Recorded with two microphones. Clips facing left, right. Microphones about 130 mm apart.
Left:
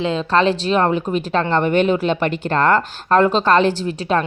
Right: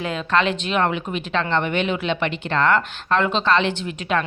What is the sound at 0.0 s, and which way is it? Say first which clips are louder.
A woman's voice: left 4 dB; 30° left (ahead or behind).